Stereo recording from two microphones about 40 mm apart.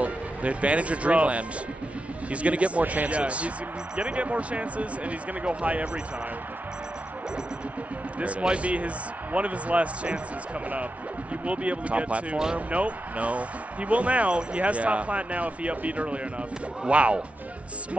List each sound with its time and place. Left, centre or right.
0.0 s speech: right
8.2 s speech: right
11.4 s speech: right